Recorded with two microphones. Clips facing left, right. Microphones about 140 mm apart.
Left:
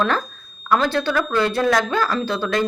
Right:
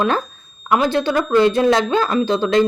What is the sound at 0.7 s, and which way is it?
A woman's voice, 15° right (ahead or behind).